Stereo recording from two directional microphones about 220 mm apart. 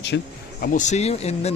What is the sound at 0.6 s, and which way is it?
Speech, 35° left (ahead or behind).